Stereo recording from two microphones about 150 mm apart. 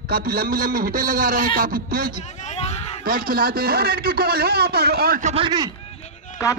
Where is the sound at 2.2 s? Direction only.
50° left (ahead or behind).